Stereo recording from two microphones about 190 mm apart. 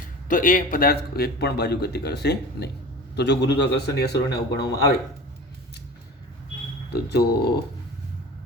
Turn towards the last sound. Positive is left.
turn(degrees=60)  # may be behind; listen again after turning